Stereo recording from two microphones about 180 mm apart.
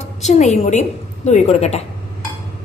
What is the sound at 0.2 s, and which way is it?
A woman's voice, 40° left (ahead or behind).